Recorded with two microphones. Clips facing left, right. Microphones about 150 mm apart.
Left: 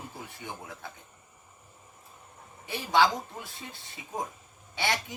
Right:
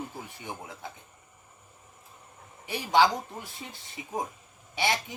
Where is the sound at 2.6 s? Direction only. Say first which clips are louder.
Right 1 dB; 15° right (ahead or behind).